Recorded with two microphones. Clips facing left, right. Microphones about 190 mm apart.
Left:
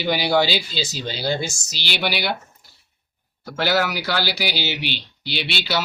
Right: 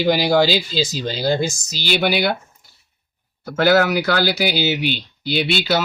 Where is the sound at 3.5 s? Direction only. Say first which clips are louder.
Right 6 dB; 50° right (ahead or behind).